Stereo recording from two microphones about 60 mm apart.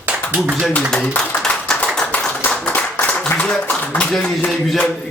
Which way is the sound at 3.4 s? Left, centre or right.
Centre.